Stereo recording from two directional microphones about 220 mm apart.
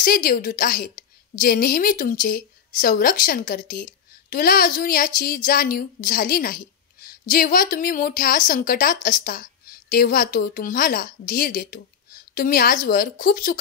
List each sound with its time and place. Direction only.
0.0 s a woman's voice: 40° left (ahead or behind)